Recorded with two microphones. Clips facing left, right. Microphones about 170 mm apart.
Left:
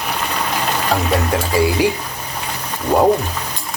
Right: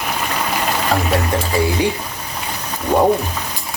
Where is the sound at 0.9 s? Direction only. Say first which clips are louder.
Even; centre (ahead or behind).